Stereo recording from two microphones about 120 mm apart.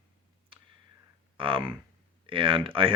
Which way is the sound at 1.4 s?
45° right (ahead or behind).